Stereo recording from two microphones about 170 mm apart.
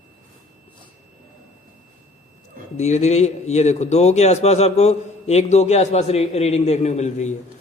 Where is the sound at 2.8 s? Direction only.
40° left (ahead or behind).